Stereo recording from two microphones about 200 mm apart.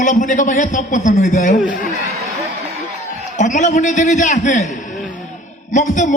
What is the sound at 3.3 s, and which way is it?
A man's voice, 40° left (ahead or behind).